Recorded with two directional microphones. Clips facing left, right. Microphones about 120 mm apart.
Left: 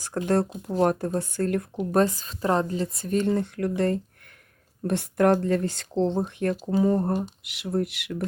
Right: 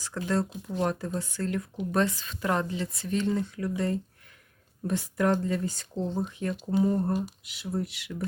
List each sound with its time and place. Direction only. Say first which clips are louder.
0.1 s speech: left 6 dB; 50° left (ahead or behind)
0.7 s speech: left 7 dB; 40° left (ahead or behind)
1.0 s speech: left 6 dB; 50° left (ahead or behind)
1.8 s speech: left 5 dB; 40° left (ahead or behind); by 8.2 s 65° left (ahead or behind)